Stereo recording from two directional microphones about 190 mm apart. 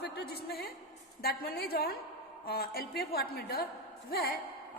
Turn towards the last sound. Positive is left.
turn(degrees=55)  # may be behind; listen again after turning